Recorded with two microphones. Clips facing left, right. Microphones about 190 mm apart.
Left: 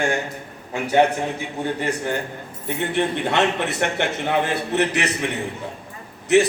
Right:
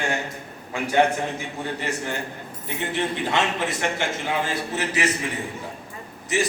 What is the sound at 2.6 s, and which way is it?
A man's voice, 60° left (ahead or behind).